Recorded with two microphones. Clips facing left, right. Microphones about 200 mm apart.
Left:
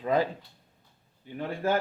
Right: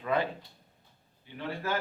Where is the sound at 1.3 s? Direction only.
50° left (ahead or behind).